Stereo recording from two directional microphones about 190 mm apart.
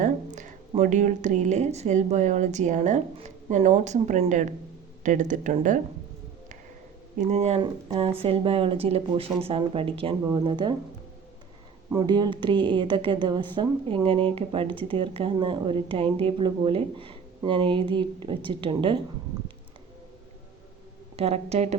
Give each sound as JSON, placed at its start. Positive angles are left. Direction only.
{"t": 0.0, "sound": "a sound", "side_deg": -40}
{"t": 0.8, "sound": "speech", "side_deg": -40}
{"t": 7.2, "sound": "speech", "side_deg": -35}
{"t": 11.9, "sound": "speech", "side_deg": -20}
{"t": 21.2, "sound": "speech", "side_deg": -35}